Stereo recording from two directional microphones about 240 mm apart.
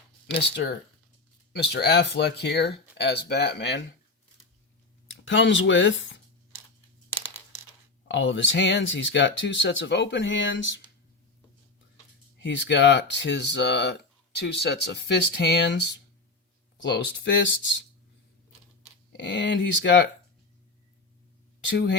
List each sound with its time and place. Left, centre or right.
0.3 s speech: left
5.2 s speech: left
8.0 s speech: left
12.4 s speech: left
19.1 s speech: left
21.7 s speech: left